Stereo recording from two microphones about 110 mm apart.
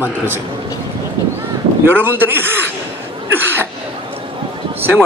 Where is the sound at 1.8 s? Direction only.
20° right (ahead or behind).